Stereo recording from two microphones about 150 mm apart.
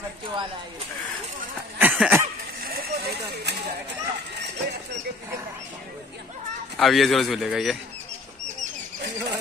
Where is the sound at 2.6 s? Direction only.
85° right.